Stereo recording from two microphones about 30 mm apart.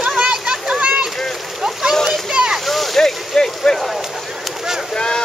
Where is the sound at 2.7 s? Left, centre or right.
Centre.